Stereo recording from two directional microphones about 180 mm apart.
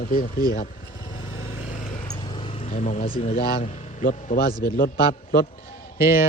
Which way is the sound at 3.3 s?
50° left (ahead or behind).